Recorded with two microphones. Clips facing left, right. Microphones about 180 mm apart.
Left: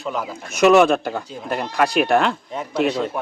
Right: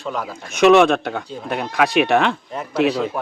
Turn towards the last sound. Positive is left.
turn(degrees=0)  # may be behind; listen again after turning